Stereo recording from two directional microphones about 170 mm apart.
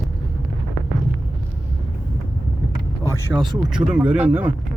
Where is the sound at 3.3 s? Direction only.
30° right (ahead or behind).